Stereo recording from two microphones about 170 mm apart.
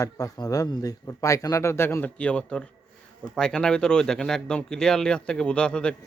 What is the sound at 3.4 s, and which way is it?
Mantra, 5° left (ahead or behind).